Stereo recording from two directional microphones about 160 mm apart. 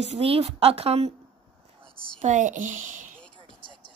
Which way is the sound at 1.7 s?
50° right (ahead or behind).